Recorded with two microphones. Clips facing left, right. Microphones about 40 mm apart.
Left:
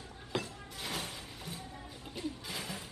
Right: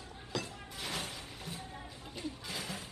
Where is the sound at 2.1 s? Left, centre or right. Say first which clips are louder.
Left 2 dB; centre.